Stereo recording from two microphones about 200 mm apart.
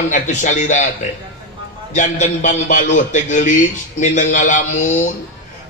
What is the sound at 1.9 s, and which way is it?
A man's voice, 35° left (ahead or behind).